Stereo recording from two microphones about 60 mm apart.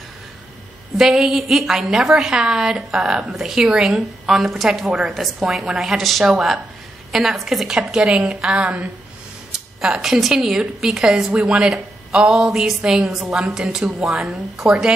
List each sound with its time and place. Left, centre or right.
0.9 s a woman's voice: centre